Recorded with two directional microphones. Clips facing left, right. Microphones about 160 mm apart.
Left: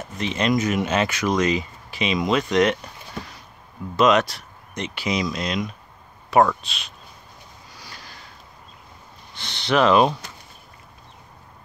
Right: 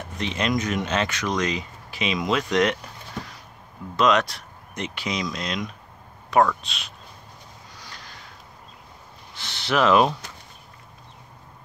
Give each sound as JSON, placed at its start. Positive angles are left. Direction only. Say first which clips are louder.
{"t": 0.0, "sound": "speech", "louder": "left 3 dB", "side_deg": 0}
{"t": 3.9, "sound": "speech", "louder": "left 3 dB", "side_deg": 5}
{"t": 9.3, "sound": "speech", "louder": "left 3 dB", "side_deg": -5}